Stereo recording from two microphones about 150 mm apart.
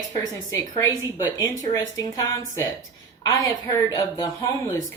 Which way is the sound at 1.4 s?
25° left (ahead or behind).